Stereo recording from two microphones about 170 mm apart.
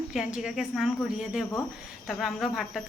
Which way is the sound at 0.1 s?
5° right (ahead or behind).